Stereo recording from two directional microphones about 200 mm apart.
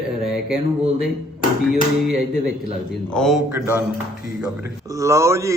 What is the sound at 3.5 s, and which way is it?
A man's voice, 10° right (ahead or behind).